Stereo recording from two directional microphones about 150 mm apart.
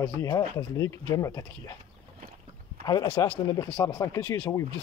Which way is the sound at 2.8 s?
30° left (ahead or behind).